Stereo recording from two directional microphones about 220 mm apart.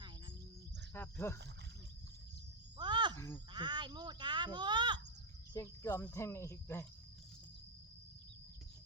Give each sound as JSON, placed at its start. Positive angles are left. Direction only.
{"t": 0.9, "sound": "speech", "side_deg": 10}
{"t": 2.7, "sound": "cricket", "side_deg": -20}
{"t": 3.2, "sound": "speech", "side_deg": 10}
{"t": 3.5, "sound": "speech", "side_deg": -20}
{"t": 5.5, "sound": "speech", "side_deg": 10}